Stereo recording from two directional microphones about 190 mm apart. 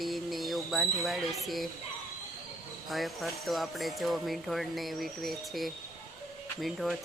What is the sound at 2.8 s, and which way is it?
Speech, centre (ahead or behind).